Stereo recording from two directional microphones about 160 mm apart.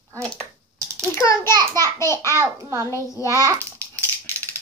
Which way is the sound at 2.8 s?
20° left (ahead or behind).